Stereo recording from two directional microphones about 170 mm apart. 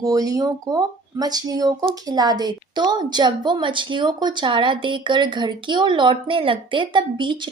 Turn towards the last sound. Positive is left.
turn(degrees=-30)  # may be behind; listen again after turning